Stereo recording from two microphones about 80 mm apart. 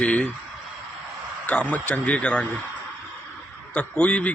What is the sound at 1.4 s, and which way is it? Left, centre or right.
A man's voice, centre.